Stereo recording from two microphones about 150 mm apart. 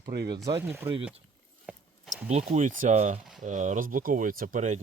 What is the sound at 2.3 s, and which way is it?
Speech, 55° right (ahead or behind).